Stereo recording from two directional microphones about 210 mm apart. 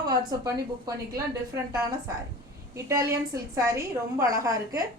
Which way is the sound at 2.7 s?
15° right (ahead or behind).